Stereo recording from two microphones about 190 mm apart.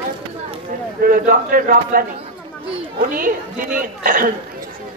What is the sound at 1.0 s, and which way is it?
A woman's voice, 45° right (ahead or behind).